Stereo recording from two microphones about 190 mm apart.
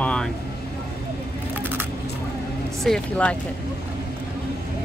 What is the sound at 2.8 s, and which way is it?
Speech, 5° left (ahead or behind).